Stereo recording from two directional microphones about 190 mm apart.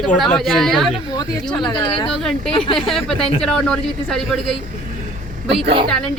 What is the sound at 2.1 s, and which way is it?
Speech, centre (ahead or behind).